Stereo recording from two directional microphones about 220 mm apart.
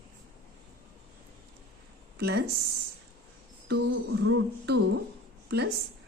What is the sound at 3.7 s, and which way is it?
Speech, 50° right (ahead or behind).